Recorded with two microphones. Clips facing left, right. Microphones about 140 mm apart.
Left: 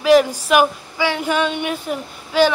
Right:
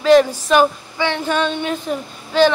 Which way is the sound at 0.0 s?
10° left (ahead or behind).